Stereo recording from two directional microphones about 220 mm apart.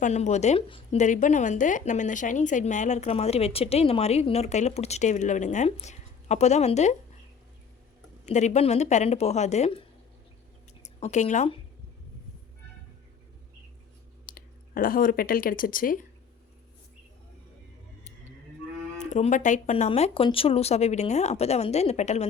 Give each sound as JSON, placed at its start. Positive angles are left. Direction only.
{"t": 0.0, "sound": "speech", "side_deg": 30}
{"t": 8.2, "sound": "speech", "side_deg": 30}
{"t": 10.8, "sound": "speech", "side_deg": 30}
{"t": 14.3, "sound": "speech", "side_deg": 40}
{"t": 18.9, "sound": "speech", "side_deg": 35}